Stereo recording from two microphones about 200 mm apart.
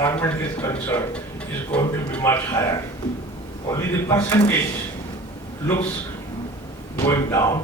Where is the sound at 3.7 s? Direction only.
10° left (ahead or behind).